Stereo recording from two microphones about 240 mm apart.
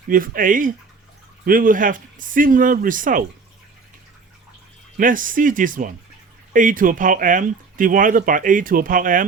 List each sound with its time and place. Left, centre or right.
0.1 s speech: right
4.9 s speech: right